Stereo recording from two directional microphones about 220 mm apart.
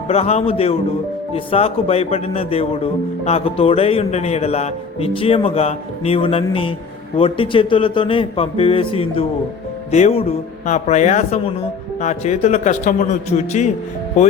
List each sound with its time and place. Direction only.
0.1 s a man's voice: 30° left (ahead or behind)